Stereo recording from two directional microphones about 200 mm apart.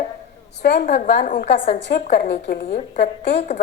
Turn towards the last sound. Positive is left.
turn(degrees=55)  # may be behind; listen again after turning